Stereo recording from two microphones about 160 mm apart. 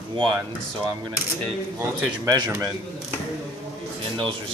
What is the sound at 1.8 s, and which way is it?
Speech, 15° right (ahead or behind).